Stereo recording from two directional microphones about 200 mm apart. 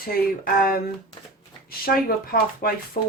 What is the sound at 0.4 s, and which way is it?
Speech, 45° left (ahead or behind).